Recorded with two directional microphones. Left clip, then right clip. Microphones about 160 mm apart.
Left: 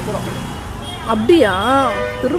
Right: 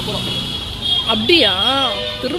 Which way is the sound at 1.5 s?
10° left (ahead or behind).